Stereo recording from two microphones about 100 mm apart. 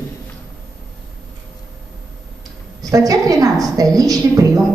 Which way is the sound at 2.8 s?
35° right (ahead or behind).